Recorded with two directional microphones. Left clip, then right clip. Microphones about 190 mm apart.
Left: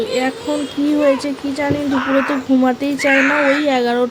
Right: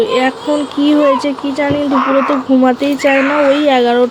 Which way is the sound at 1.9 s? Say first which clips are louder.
Right 5 dB; 20° right (ahead or behind).